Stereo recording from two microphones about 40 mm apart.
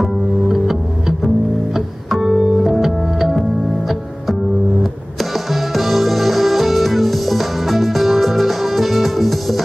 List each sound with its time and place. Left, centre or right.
0.0 s music: centre
5.5 s music: centre